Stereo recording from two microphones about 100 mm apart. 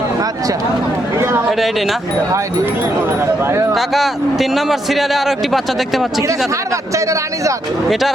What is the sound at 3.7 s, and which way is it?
Speech, centre (ahead or behind).